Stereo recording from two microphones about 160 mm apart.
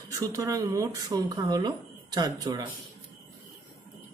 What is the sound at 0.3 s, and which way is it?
Speech, 20° right (ahead or behind).